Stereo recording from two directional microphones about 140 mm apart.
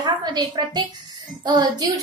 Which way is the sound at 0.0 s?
30° right (ahead or behind).